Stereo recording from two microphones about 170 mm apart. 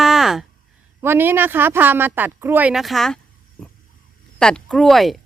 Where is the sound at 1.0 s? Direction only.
15° right (ahead or behind).